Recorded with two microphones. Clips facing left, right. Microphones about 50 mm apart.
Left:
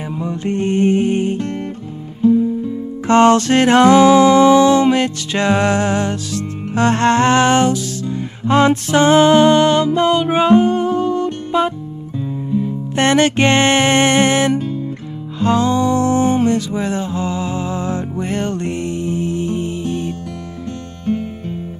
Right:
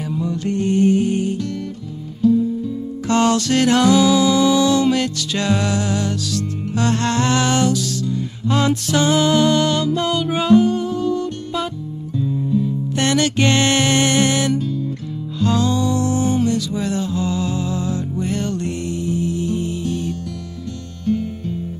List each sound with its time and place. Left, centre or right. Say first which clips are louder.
0.1 s music: left 1 dB; left